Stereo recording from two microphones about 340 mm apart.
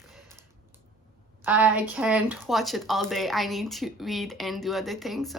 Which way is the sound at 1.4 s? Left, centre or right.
Centre.